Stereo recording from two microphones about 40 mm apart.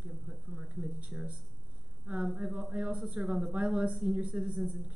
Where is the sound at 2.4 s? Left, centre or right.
Right.